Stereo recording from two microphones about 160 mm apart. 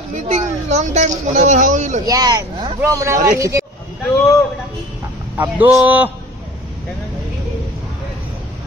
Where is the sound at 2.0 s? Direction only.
25° right (ahead or behind).